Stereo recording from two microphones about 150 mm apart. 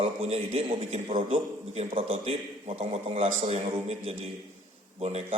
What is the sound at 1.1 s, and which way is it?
Speech, 60° right (ahead or behind).